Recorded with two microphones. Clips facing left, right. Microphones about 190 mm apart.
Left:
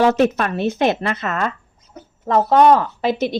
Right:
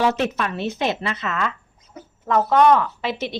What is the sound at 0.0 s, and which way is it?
A woman's voice, 45° left (ahead or behind).